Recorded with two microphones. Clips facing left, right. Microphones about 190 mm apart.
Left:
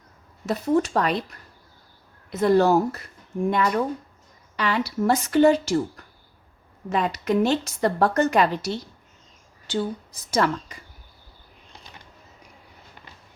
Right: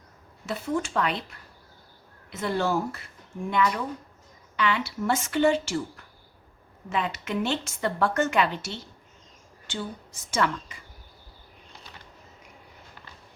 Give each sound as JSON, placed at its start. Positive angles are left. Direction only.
{"t": 0.4, "sound": "a woman's voice", "side_deg": 40}